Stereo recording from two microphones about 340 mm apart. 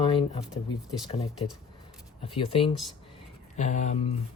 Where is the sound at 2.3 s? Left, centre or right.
Centre.